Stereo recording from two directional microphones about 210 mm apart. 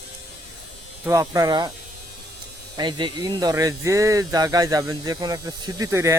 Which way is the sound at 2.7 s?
20° right (ahead or behind).